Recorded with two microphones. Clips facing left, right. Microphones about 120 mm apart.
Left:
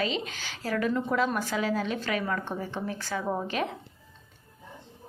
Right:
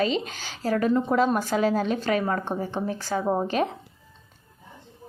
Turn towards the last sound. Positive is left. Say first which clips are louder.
# right 6 dB
turn(degrees=-35)  # may be behind; listen again after turning